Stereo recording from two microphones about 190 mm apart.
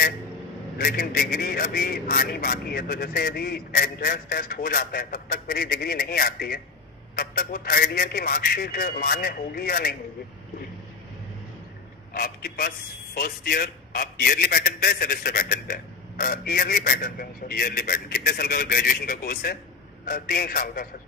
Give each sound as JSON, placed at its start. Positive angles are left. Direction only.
{"t": 0.8, "sound": "a man's voice", "side_deg": 50}
{"t": 12.1, "sound": "a man's voice", "side_deg": 50}